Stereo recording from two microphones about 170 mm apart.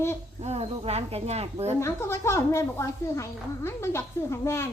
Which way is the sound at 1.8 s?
15° left (ahead or behind).